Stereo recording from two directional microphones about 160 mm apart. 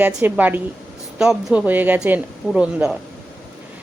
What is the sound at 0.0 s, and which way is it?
A woman's voice, 10° right (ahead or behind).